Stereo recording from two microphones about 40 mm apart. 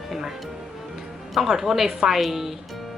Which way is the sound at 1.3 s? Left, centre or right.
Centre.